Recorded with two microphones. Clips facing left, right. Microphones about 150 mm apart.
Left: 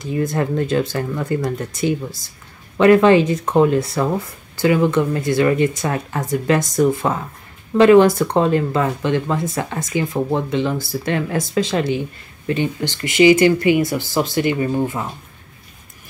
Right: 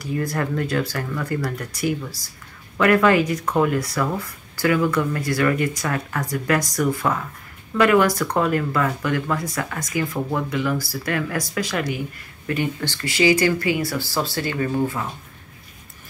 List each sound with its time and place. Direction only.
0.0 s speech: 20° left (ahead or behind)